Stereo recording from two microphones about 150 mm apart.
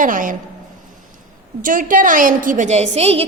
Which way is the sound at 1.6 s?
65° right (ahead or behind).